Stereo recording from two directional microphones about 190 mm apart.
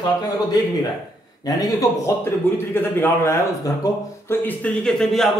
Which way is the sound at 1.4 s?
20° left (ahead or behind).